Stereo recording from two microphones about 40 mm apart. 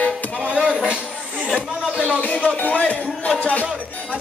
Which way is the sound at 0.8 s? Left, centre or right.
Right.